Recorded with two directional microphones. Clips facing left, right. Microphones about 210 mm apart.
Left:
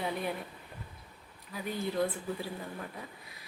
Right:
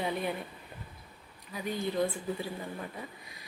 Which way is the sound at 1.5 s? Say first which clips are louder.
Right 1 dB; centre (ahead or behind).